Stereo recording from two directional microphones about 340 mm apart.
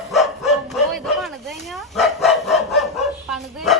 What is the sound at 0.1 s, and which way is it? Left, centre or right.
Bow-wow, centre.